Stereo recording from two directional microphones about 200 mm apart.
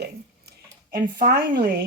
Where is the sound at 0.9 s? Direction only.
45° right (ahead or behind).